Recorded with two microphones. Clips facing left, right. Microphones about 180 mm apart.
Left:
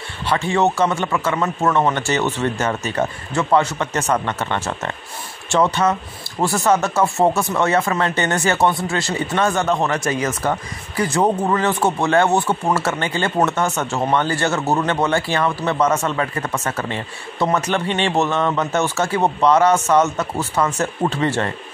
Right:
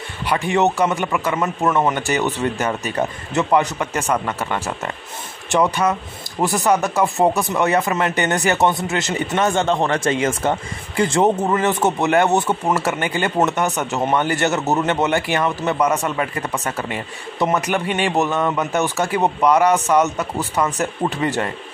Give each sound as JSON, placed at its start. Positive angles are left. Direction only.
{"t": 0.3, "sound": "speech", "side_deg": -15}